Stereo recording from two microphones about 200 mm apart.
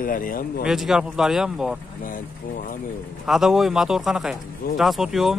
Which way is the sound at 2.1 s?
45° left (ahead or behind).